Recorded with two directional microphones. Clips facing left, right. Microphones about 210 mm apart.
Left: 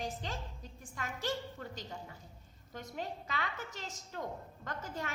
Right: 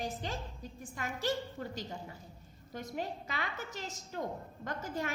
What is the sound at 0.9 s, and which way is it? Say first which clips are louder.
A woman's voice: right 3 dB; 10° right (ahead or behind).